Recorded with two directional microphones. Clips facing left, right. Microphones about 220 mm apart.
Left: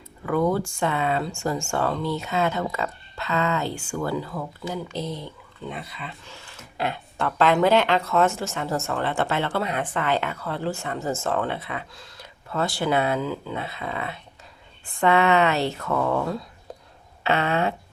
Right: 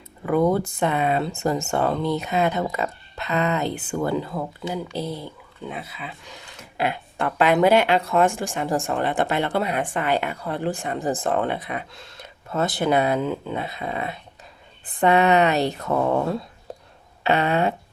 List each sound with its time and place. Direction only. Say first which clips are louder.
0.3 s speech: right 3 dB; 20° right (ahead or behind)
4.7 s speech: right 1 dB; 10° right (ahead or behind)
13.9 s speech: right 3 dB; 35° right (ahead or behind)
14.9 s speech: right 2 dB; 20° right (ahead or behind)